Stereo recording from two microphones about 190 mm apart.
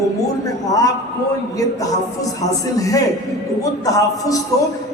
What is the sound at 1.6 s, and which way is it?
A woman's voice, 20° left (ahead or behind).